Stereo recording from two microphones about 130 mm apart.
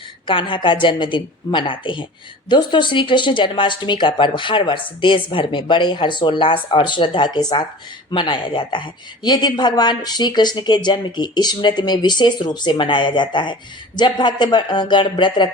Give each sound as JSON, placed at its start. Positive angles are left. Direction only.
{"t": 0.3, "sound": "a woman's voice", "side_deg": 40}